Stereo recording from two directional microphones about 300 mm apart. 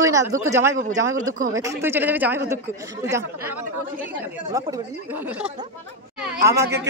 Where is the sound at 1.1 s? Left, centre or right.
Right.